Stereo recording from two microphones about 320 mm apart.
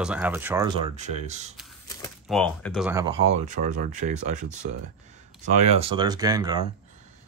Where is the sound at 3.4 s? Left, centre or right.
Right.